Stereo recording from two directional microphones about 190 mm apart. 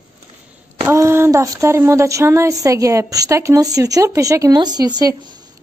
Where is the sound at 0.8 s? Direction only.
15° right (ahead or behind).